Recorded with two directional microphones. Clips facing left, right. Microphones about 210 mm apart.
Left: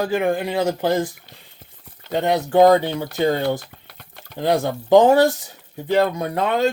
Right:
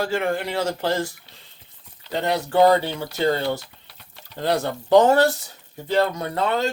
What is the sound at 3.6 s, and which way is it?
Typing, 55° left (ahead or behind).